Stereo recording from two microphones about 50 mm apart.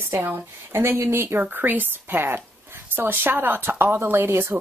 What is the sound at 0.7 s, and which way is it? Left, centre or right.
Speech, right.